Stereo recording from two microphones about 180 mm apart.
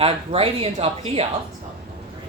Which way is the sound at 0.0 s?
30° right (ahead or behind).